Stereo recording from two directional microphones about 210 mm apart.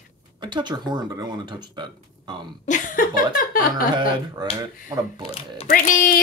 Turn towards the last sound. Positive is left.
turn(degrees=40)  # may be behind; listen again after turning